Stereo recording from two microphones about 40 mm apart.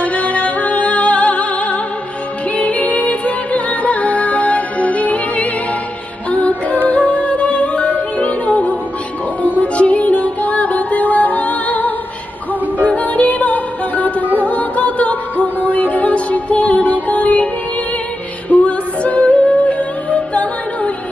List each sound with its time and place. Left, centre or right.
0.0 s music: left
18.7 s music: left